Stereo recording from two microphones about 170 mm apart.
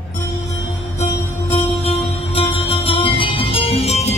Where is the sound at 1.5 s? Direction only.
35° left (ahead or behind).